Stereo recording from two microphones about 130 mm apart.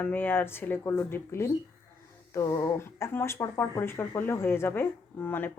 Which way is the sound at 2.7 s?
20° left (ahead or behind).